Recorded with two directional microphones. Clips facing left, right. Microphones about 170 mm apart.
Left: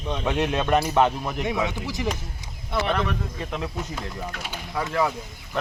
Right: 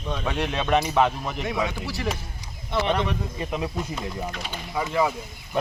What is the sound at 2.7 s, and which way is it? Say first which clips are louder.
Speech: right 1 dB; centre (ahead or behind).